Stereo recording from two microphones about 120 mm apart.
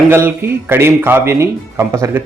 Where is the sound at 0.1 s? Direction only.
20° right (ahead or behind).